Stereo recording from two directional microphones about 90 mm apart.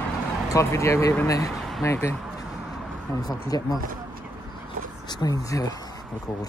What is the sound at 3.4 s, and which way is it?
Speech, 45° left (ahead or behind).